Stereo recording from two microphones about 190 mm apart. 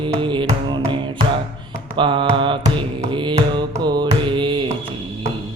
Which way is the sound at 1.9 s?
25° right (ahead or behind).